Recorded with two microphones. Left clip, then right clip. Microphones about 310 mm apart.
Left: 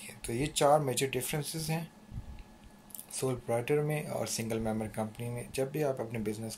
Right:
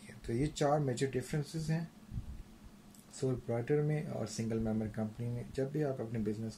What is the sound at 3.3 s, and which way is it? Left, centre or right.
Speech, left.